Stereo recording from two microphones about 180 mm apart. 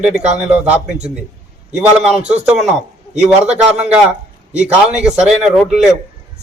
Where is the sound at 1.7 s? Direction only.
5° right (ahead or behind).